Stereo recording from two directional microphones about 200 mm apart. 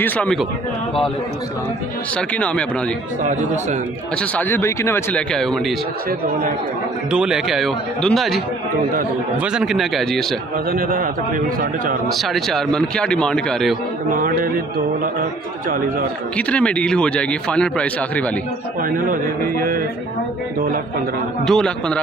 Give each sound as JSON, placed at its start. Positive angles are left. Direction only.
{"t": 0.0, "sound": "speech", "side_deg": 5}
{"t": 2.1, "sound": "a man's voice", "side_deg": 5}
{"t": 4.2, "sound": "a man's voice", "side_deg": 10}
{"t": 7.1, "sound": "a man's voice", "side_deg": -5}
{"t": 9.4, "sound": "a man's voice", "side_deg": -5}
{"t": 10.7, "sound": "a man's voice", "side_deg": -45}
{"t": 12.1, "sound": "a man's voice", "side_deg": 0}
{"t": 14.1, "sound": "a man's voice", "side_deg": -45}
{"t": 16.3, "sound": "a man's voice", "side_deg": 5}
{"t": 18.8, "sound": "a man's voice", "side_deg": -45}
{"t": 21.5, "sound": "a man's voice", "side_deg": 5}